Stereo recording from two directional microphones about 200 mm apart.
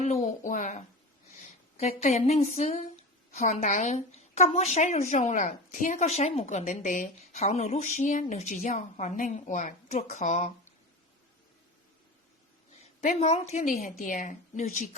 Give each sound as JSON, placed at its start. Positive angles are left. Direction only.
{"t": 0.0, "sound": "a woman's voice", "side_deg": 35}
{"t": 13.0, "sound": "a woman's voice", "side_deg": 35}